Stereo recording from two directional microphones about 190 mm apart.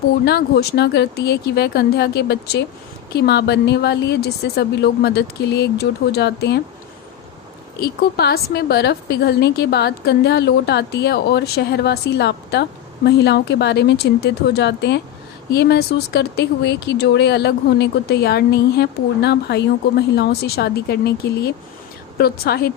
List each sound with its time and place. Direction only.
0.3 s speech: 55° left (ahead or behind)
7.8 s speech: 55° left (ahead or behind)